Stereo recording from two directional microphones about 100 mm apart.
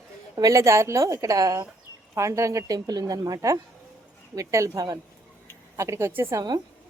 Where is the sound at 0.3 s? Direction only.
35° right (ahead or behind).